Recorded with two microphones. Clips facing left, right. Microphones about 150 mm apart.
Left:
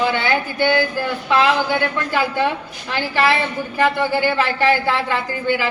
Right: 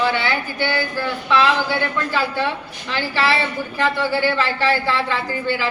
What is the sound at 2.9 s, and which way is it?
Speech, 15° left (ahead or behind).